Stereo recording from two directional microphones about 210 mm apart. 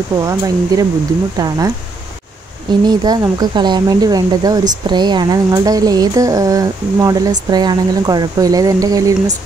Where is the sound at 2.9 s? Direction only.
20° right (ahead or behind).